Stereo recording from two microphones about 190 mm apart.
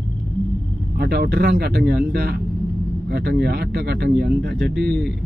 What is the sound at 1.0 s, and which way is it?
Speech, 60° right (ahead or behind).